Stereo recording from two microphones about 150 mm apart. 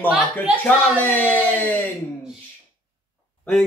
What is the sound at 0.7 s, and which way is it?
Speech, 10° left (ahead or behind).